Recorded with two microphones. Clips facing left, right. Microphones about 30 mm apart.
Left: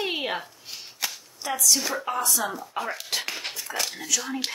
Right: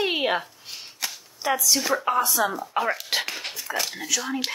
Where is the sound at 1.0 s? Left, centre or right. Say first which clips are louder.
Left 1 dB; centre.